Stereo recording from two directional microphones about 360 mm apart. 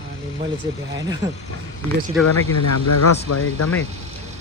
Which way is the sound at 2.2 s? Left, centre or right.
Left.